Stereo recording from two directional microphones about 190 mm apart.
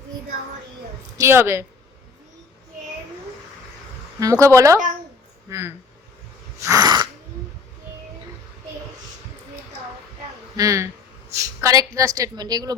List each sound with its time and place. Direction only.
1.2 s speech: 15° right (ahead or behind)
4.2 s speech: 15° right (ahead or behind)
6.6 s sneeze: 20° right (ahead or behind)
10.6 s a woman's voice: 15° right (ahead or behind)